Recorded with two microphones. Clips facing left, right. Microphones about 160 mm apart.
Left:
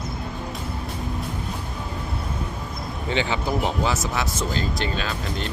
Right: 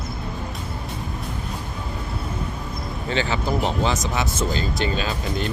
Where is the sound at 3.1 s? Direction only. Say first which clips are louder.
Right 1 dB; 15° left (ahead or behind).